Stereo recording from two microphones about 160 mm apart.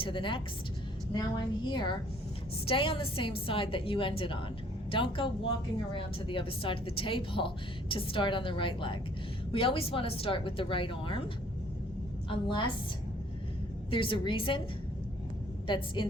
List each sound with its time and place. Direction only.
0.0 s a woman's voice: 30° left (ahead or behind)
12.3 s a woman's voice: 30° left (ahead or behind)
13.9 s a woman's voice: 35° left (ahead or behind)
15.6 s a woman's voice: 30° left (ahead or behind)